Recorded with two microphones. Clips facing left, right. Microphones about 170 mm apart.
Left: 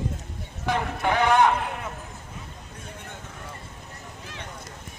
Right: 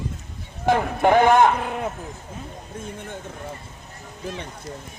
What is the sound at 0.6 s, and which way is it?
Clip-clop, 50° right (ahead or behind).